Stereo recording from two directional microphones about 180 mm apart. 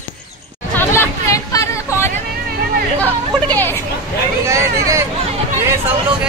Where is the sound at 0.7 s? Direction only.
15° left (ahead or behind).